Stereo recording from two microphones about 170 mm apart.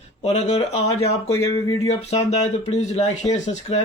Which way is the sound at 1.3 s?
20° left (ahead or behind).